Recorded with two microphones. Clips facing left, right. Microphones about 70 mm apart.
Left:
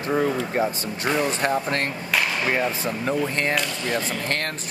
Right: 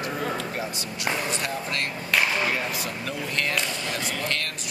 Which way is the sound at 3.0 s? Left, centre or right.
Left.